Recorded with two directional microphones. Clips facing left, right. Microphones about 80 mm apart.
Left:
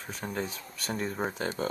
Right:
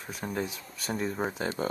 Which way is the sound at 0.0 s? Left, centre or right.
Centre.